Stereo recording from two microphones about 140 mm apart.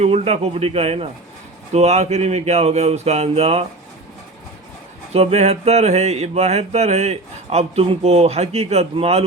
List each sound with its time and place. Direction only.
0.0 s mantra: 50° right (ahead or behind)
5.1 s mantra: 50° right (ahead or behind)